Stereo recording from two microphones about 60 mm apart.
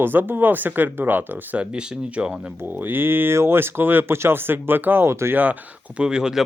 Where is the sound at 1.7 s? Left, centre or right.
Centre.